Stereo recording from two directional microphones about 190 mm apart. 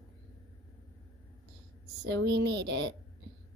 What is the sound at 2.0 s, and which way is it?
Speech, 65° right (ahead or behind).